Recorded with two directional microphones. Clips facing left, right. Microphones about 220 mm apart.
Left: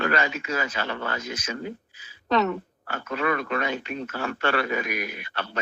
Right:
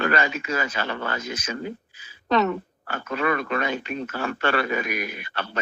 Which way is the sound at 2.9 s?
50° right (ahead or behind).